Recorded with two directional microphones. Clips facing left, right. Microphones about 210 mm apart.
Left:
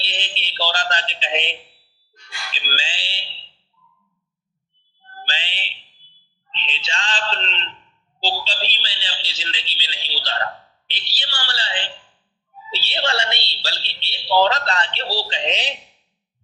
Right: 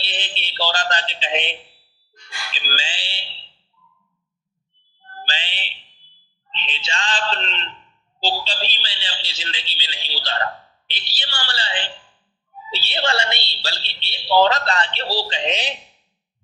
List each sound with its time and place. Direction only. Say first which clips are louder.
0.0 s a sound: right 1 dB; 50° right (ahead or behind)
2.7 s a woman's voice: right 1 dB; 50° right (ahead or behind)
5.3 s a woman's voice: even; 50° right (ahead or behind)